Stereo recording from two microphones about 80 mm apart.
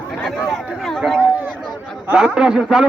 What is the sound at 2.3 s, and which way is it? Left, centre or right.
Speech, centre.